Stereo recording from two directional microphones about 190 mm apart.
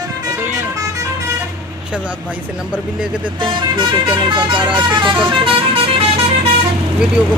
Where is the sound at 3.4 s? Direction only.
25° right (ahead or behind).